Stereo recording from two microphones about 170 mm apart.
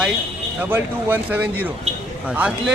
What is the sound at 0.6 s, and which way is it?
A man's voice, 10° right (ahead or behind).